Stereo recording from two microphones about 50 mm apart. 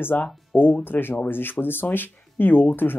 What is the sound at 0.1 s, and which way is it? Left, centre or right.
Speech, left.